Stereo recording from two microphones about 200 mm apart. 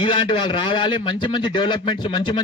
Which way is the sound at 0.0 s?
25° left (ahead or behind).